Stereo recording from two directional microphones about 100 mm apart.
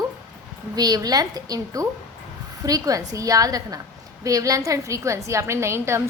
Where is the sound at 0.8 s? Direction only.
40° right (ahead or behind).